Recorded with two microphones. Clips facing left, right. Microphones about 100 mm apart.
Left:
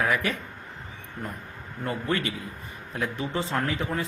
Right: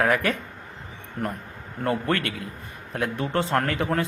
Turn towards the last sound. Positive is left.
turn(degrees=-75)  # may be behind; listen again after turning